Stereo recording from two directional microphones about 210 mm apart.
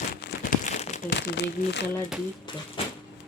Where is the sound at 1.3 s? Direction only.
55° left (ahead or behind).